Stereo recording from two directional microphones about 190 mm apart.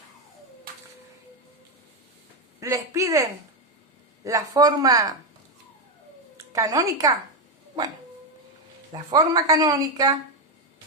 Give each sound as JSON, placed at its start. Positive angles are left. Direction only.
{"t": 2.6, "sound": "a man's voice", "side_deg": -15}
{"t": 6.5, "sound": "a man's voice", "side_deg": -15}
{"t": 8.9, "sound": "a woman's voice", "side_deg": -20}